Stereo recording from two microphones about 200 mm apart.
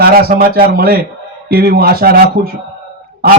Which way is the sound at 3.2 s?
50° right (ahead or behind).